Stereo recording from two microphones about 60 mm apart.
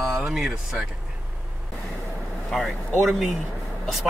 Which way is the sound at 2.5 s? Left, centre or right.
Centre.